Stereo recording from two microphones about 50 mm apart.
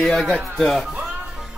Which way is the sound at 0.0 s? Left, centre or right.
Centre.